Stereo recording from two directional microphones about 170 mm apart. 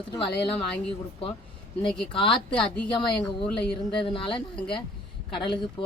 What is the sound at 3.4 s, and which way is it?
Speech, 5° left (ahead or behind).